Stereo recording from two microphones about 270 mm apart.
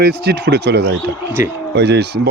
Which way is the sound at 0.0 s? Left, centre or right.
Right.